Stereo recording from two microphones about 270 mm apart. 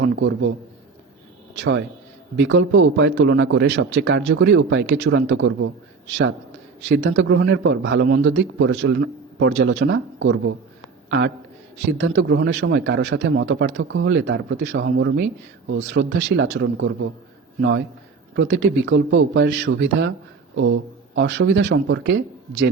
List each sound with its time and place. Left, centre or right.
0.0 s a man's voice: right
1.5 s a man's voice: right
6.8 s a man's voice: right
11.9 s a man's voice: right
21.2 s a man's voice: right